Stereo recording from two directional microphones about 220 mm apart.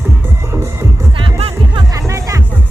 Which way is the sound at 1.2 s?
25° right (ahead or behind).